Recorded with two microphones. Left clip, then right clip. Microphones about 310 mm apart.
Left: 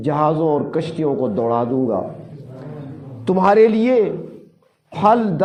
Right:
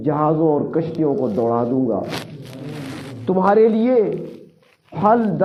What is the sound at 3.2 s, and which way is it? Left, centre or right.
A man's voice, left.